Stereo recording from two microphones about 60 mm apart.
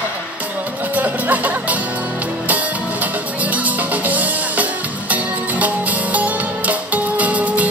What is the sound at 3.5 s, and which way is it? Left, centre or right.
Music, right.